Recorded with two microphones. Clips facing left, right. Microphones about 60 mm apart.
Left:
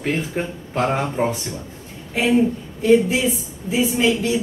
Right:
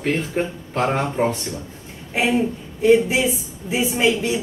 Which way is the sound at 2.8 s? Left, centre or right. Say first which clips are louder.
Even; centre.